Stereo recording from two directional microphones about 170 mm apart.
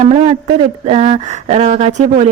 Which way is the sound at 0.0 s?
40° right (ahead or behind).